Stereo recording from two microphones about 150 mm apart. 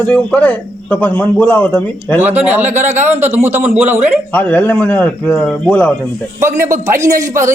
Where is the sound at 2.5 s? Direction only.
10° right (ahead or behind).